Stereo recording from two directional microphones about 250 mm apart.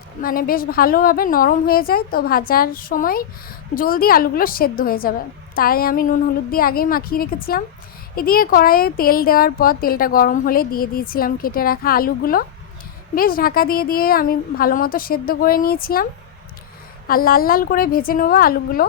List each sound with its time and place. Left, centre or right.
0.2 s a woman's voice: left
17.1 s a woman's voice: left